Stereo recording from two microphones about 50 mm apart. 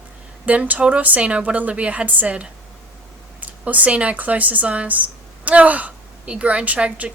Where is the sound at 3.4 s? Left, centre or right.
Right.